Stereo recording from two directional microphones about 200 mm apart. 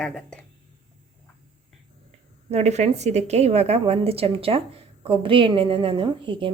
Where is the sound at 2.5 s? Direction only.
35° right (ahead or behind).